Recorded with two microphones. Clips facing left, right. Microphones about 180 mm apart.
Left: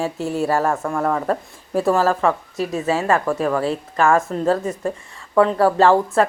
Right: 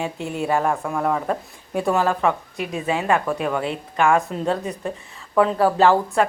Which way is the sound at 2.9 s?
Centre (ahead or behind).